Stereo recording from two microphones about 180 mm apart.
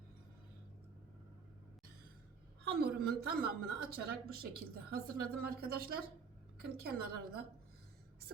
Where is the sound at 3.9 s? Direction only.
60° right (ahead or behind).